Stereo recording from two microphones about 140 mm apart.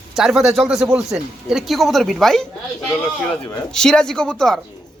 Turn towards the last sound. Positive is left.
turn(degrees=5)  # may be behind; listen again after turning